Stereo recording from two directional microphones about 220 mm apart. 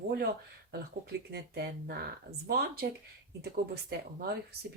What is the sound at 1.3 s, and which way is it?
Speech, 45° right (ahead or behind).